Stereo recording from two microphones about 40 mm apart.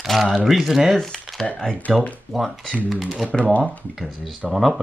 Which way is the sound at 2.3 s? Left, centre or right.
Centre.